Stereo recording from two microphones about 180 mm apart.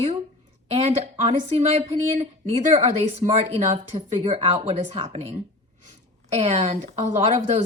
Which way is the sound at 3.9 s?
30° right (ahead or behind).